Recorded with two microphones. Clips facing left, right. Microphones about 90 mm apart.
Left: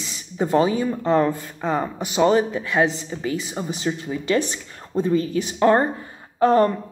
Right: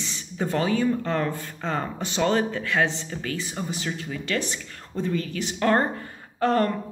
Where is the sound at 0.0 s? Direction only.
15° left (ahead or behind).